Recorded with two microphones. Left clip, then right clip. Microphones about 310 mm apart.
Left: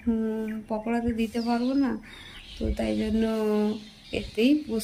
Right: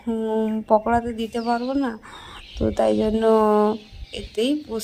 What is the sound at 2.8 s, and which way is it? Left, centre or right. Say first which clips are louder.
Speech: right 10 dB; right.